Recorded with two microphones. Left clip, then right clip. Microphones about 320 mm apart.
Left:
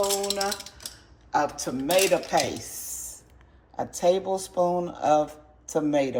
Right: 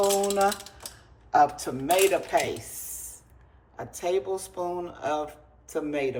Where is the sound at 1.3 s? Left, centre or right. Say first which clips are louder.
Right 4 dB; centre.